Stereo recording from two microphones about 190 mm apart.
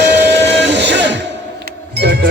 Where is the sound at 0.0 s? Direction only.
60° right (ahead or behind).